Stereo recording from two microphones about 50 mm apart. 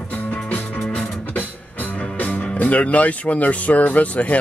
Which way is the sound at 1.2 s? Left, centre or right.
Left.